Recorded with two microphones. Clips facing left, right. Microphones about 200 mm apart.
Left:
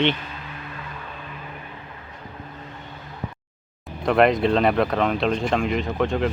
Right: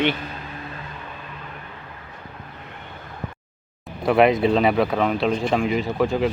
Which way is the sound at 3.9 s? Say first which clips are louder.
Right 1 dB; 5° right (ahead or behind).